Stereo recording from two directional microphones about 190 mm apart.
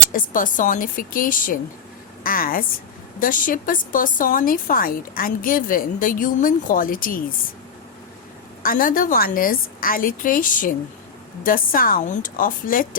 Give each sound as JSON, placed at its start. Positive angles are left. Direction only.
{"t": 0.1, "sound": "speech", "side_deg": 45}
{"t": 8.6, "sound": "speech", "side_deg": 45}